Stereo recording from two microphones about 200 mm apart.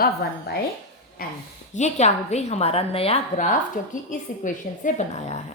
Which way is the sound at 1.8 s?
35° left (ahead or behind).